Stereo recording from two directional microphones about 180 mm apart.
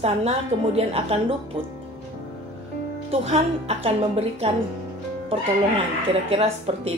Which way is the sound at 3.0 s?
35° right (ahead or behind).